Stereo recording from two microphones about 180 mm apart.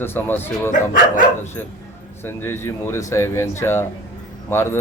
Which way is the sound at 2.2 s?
10° left (ahead or behind).